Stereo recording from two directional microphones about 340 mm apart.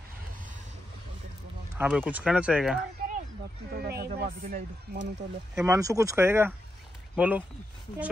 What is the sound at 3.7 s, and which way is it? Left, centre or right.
Speech, right.